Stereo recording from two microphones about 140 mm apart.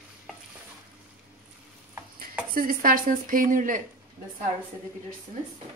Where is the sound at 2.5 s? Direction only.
90° right; by 3.8 s 70° right (ahead or behind).